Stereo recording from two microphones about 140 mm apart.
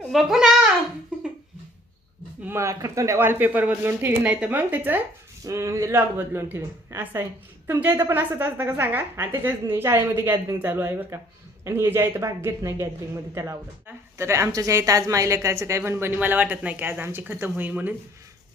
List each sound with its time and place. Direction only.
0.1 s a child's voice: centre (ahead or behind)
2.4 s a man's voice: 20° right (ahead or behind)